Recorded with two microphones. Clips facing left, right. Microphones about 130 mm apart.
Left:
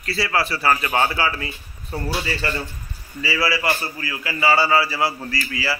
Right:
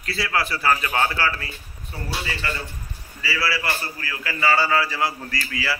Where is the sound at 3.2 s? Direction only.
20° left (ahead or behind).